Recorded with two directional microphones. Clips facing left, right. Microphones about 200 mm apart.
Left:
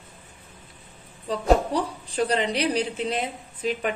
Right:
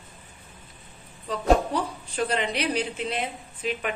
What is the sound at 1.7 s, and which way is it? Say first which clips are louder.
A woman's voice: left 2 dB; 35° left (ahead or behind).